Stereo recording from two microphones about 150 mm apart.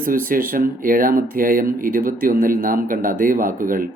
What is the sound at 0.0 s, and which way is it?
Speech, 70° right (ahead or behind).